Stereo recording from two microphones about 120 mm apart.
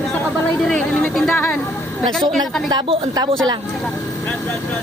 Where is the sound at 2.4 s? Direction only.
35° right (ahead or behind).